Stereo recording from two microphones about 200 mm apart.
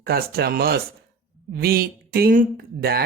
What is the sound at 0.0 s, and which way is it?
Speech, 50° right (ahead or behind).